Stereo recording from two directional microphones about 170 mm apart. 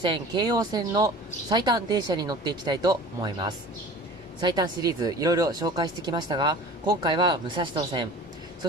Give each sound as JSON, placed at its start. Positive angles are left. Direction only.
{"t": 0.0, "sound": "speech", "side_deg": -25}